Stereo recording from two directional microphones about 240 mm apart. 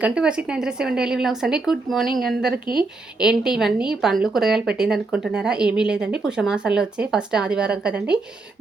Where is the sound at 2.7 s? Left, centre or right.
Centre.